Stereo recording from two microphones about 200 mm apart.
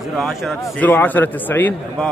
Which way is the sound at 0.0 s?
Centre (ahead or behind).